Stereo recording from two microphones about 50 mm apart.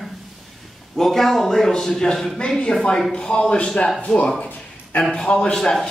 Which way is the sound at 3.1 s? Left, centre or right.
Centre.